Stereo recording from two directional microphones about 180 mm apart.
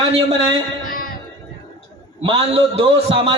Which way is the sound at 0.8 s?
50° left (ahead or behind).